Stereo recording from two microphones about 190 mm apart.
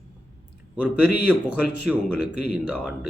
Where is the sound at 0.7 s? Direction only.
5° right (ahead or behind).